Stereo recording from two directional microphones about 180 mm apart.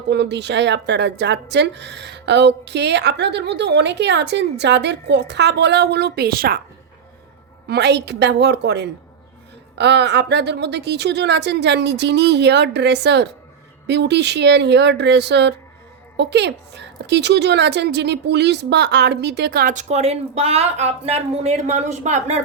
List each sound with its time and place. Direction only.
0.1 s speech: 70° right (ahead or behind)
7.7 s speech: 70° right (ahead or behind); by 22.4 s 40° right (ahead or behind)